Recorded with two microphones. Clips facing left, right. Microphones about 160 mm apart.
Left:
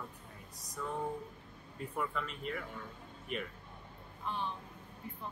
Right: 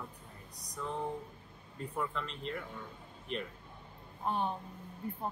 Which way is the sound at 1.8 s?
5° left (ahead or behind).